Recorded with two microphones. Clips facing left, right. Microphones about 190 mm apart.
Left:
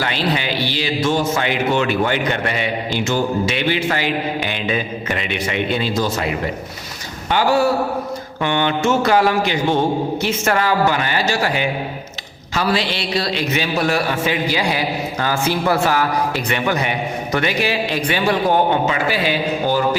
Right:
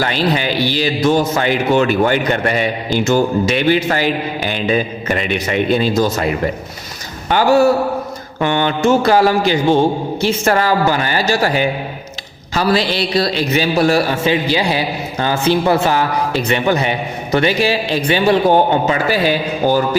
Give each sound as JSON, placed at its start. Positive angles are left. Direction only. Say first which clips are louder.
{"t": 0.0, "sound": "speech", "louder": "right 4 dB", "side_deg": -40}
{"t": 7.3, "sound": "a man's voice", "louder": "right 4 dB", "side_deg": -45}